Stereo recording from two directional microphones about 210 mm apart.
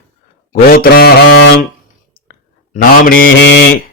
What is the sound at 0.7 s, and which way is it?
Speech, 45° left (ahead or behind).